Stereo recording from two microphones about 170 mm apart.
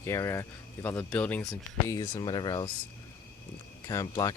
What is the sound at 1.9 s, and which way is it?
Speech, 20° left (ahead or behind).